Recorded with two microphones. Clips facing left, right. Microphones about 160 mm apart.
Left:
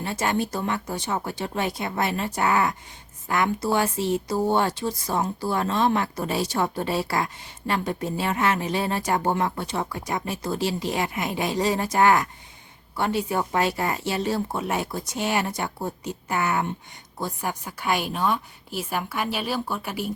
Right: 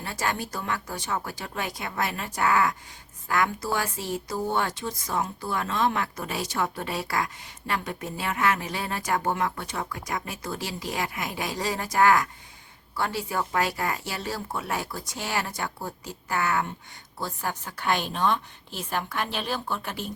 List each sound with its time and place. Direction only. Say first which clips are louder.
0.0 s a woman's voice: left 5 dB; 25° left (ahead or behind)